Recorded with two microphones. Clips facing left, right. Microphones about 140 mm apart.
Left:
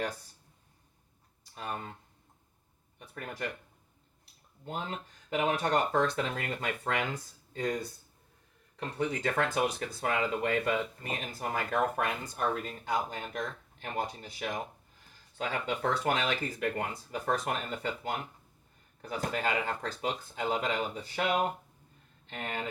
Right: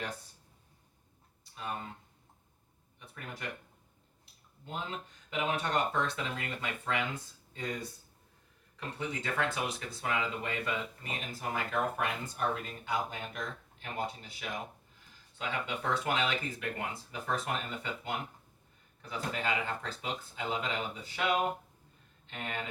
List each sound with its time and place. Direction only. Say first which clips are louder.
4.6 s speech: left 2 dB; 45° left (ahead or behind)
22.3 s speech: left 2 dB; 40° left (ahead or behind)